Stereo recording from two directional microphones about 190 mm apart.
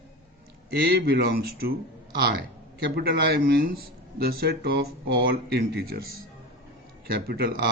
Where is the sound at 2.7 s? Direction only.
55° right (ahead or behind).